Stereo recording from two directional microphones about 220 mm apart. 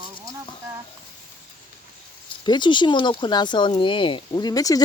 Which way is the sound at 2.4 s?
20° left (ahead or behind).